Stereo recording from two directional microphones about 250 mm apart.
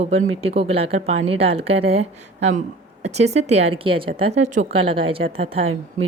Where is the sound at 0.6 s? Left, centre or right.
Right.